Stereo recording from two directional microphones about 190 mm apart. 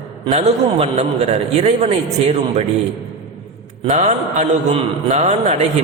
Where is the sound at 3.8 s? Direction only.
40° right (ahead or behind).